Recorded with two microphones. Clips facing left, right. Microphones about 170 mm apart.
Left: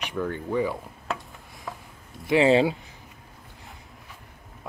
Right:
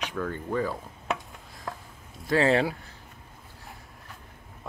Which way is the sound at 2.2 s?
20° left (ahead or behind).